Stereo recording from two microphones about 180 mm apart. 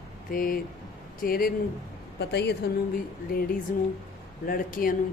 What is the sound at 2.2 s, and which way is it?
Speech, 70° left (ahead or behind).